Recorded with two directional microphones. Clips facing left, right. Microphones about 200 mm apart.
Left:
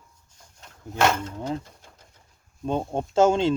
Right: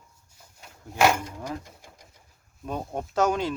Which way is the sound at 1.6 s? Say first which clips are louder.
Right 2 dB; 15° right (ahead or behind).